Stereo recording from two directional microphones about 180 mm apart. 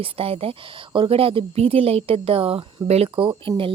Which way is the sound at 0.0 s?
30° right (ahead or behind).